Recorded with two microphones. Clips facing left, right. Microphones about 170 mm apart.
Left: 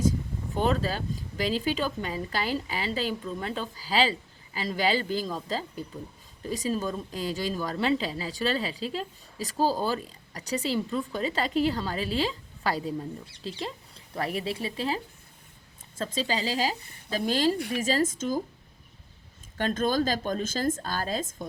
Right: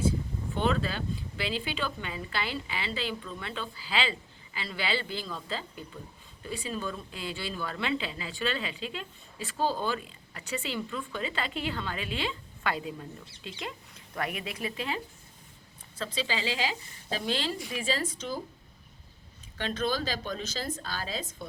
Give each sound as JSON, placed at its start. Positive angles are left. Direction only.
{"t": 0.5, "sound": "speech", "side_deg": 40}
{"t": 16.0, "sound": "a woman's voice", "side_deg": 45}
{"t": 19.5, "sound": "a woman's voice", "side_deg": 45}